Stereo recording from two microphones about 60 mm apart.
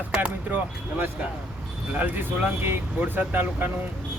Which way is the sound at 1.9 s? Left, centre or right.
Right.